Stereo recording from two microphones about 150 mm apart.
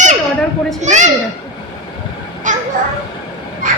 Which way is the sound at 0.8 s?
55° right (ahead or behind).